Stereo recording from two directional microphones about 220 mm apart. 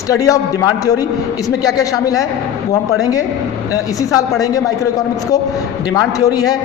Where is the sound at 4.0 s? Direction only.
15° left (ahead or behind).